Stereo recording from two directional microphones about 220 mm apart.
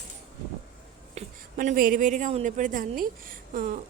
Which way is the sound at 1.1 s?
35° right (ahead or behind).